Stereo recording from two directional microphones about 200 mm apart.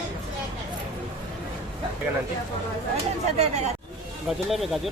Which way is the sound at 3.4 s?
35° right (ahead or behind).